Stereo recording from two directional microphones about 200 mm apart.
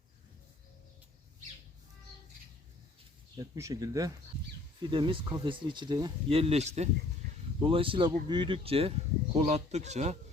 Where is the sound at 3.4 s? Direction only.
15° right (ahead or behind).